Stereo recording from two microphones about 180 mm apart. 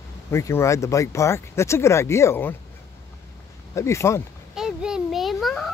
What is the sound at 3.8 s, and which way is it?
Speech, 15° left (ahead or behind).